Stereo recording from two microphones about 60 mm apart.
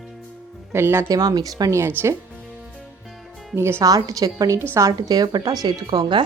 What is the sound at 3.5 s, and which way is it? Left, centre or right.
Speech, right.